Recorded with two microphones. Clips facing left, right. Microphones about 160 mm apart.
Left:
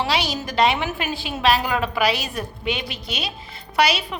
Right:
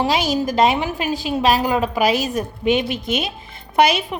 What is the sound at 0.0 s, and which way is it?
A woman's voice, 45° right (ahead or behind).